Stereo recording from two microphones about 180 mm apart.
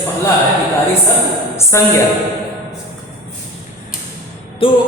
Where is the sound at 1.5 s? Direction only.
15° left (ahead or behind).